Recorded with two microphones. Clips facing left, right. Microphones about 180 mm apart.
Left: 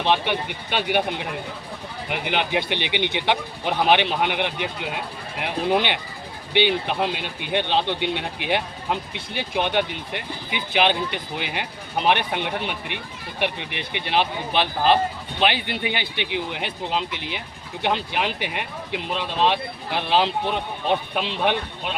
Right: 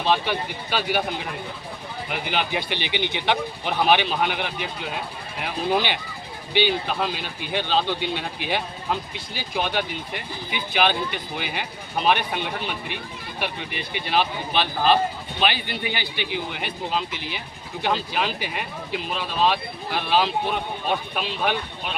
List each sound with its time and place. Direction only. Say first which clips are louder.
0.0 s speech: left 1 dB; 20° left (ahead or behind)
2.0 s speech: left 2 dB; 20° left (ahead or behind)